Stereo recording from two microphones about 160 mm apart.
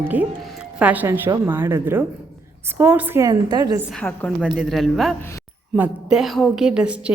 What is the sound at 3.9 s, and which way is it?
A woman's voice, 5° left (ahead or behind).